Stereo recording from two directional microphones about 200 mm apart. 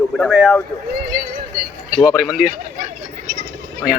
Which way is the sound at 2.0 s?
5° right (ahead or behind).